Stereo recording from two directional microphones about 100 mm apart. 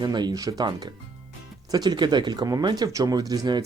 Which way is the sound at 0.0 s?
45° right (ahead or behind).